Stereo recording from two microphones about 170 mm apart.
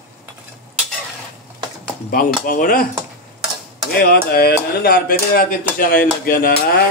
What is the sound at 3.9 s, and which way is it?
Speech, 65° left (ahead or behind).